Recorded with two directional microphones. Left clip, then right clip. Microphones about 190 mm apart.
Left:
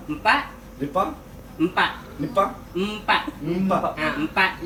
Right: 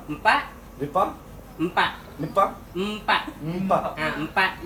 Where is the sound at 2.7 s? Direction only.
10° right (ahead or behind).